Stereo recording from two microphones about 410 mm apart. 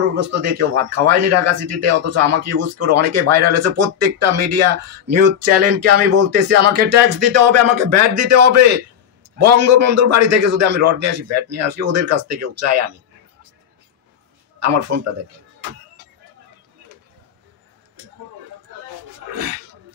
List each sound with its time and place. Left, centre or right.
0.1 s speech: right
14.6 s speech: right